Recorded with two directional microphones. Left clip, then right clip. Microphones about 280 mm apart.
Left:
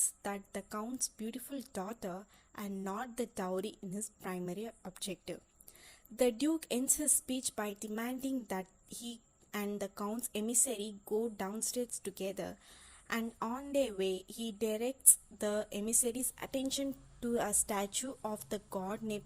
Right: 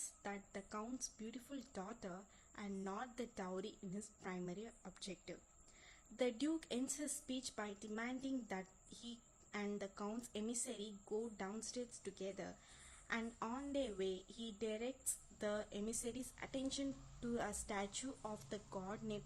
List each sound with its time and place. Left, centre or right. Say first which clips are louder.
0.2 s a woman's voice: left 8 dB; left